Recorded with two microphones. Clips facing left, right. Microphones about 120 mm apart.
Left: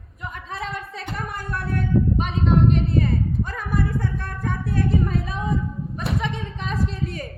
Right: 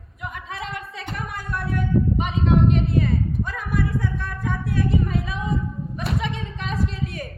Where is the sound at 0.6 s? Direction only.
35° left (ahead or behind).